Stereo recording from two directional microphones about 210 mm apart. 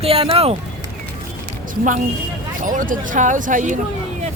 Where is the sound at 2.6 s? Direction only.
40° right (ahead or behind).